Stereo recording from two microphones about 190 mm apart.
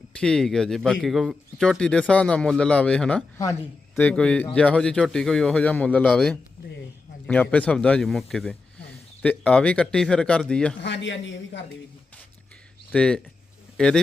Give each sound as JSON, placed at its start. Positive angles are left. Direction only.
{"t": 0.1, "sound": "a man's voice", "side_deg": 5}
{"t": 10.8, "sound": "speech", "side_deg": 70}
{"t": 12.9, "sound": "speech", "side_deg": 5}